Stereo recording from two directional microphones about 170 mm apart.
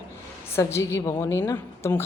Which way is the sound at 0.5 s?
15° left (ahead or behind).